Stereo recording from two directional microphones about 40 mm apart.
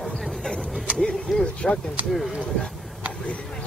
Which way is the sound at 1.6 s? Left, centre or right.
Centre.